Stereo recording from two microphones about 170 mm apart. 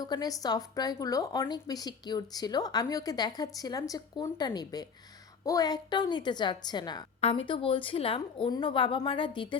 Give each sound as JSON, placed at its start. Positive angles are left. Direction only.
{"t": 0.0, "sound": "a woman's voice", "side_deg": 25}